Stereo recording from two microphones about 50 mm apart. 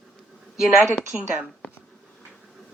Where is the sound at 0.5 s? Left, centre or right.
Centre.